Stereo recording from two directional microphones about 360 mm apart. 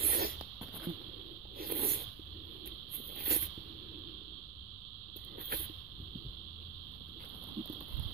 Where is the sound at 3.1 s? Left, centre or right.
Right.